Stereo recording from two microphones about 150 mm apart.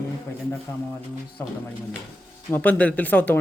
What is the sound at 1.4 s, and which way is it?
A man's voice, 15° left (ahead or behind).